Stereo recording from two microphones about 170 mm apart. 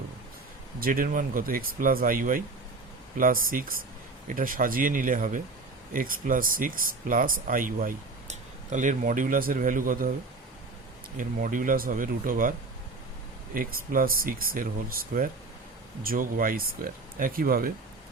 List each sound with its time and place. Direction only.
0.8 s speech: 55° right (ahead or behind)
11.2 s speech: 55° right (ahead or behind)